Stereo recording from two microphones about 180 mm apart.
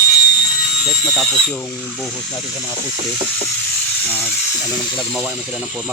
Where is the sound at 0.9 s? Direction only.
Centre (ahead or behind).